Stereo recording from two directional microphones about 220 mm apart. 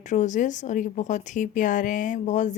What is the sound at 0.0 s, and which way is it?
Speech, 35° left (ahead or behind).